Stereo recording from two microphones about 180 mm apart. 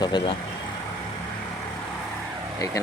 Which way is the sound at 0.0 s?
25° left (ahead or behind).